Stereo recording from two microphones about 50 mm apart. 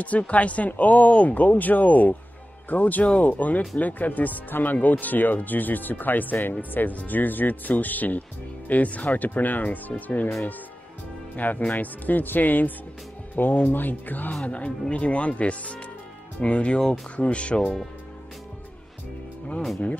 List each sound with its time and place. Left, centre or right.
0.0 s speech: left
11.3 s speech: left
14.3 s speech: left